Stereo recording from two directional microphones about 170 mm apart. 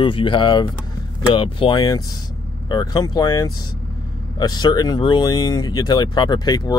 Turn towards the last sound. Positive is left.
turn(degrees=25)  # may be behind; listen again after turning